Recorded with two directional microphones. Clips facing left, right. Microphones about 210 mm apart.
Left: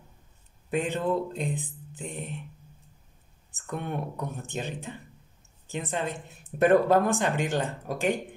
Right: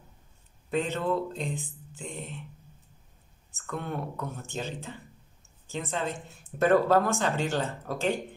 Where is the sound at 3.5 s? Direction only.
15° left (ahead or behind).